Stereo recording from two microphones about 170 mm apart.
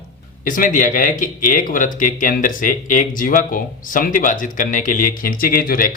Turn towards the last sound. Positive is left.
turn(degrees=55)  # may be behind; listen again after turning